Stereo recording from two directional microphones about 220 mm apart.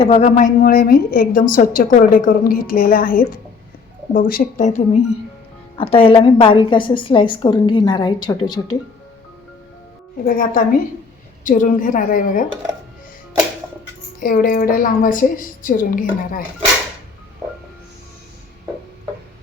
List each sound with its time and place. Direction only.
0.0 s a woman's voice: 30° left (ahead or behind)
5.7 s a woman's voice: 25° left (ahead or behind)
10.2 s a woman's voice: 40° left (ahead or behind)
14.2 s a woman's voice: 40° left (ahead or behind)